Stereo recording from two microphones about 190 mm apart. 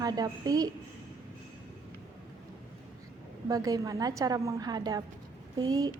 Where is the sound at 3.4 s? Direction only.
20° right (ahead or behind).